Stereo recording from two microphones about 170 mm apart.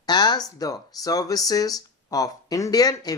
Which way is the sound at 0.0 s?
25° left (ahead or behind).